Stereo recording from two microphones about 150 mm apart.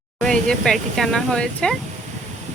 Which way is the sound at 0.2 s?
5° left (ahead or behind).